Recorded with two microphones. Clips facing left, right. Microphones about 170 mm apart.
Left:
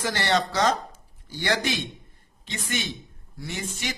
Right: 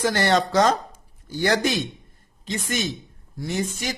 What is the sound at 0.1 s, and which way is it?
A man's voice, 45° right (ahead or behind).